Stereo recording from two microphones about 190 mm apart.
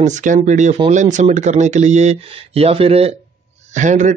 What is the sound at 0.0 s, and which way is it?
A man's voice, 40° right (ahead or behind).